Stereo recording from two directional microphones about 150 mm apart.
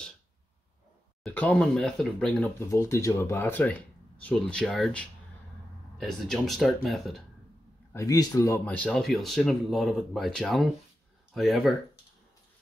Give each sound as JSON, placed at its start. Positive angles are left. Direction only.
{"t": 1.2, "sound": "speech", "side_deg": 10}
{"t": 2.7, "sound": "speech", "side_deg": 20}
{"t": 7.9, "sound": "speech", "side_deg": 20}
{"t": 8.6, "sound": "speech", "side_deg": 10}